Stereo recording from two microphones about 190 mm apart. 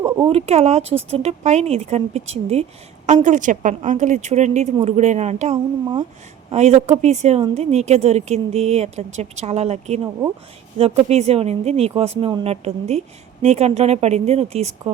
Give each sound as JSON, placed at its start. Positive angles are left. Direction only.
{"t": 0.3, "sound": "a woman's voice", "side_deg": -35}